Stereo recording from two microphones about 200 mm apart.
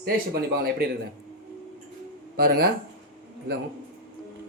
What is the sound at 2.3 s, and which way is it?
Speech, 50° right (ahead or behind).